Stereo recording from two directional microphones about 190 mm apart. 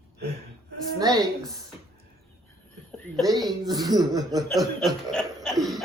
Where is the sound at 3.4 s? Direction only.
20° right (ahead or behind).